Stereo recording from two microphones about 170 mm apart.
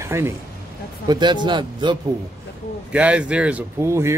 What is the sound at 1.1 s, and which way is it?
Speech, 25° right (ahead or behind).